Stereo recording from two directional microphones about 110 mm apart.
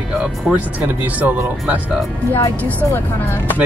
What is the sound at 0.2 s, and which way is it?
Speech, 10° right (ahead or behind).